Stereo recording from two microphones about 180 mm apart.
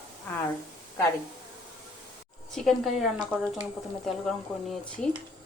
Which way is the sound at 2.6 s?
Centre (ahead or behind).